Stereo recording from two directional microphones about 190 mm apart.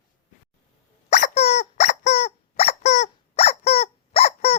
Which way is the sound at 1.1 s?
35° left (ahead or behind).